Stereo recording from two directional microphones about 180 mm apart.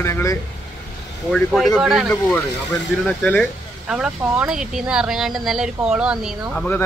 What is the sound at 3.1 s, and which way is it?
Speech, 5° left (ahead or behind).